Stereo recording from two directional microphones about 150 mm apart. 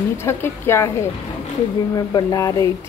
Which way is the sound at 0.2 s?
15° left (ahead or behind).